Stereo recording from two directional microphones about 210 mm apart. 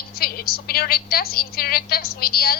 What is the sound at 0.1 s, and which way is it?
A woman's voice, 45° left (ahead or behind).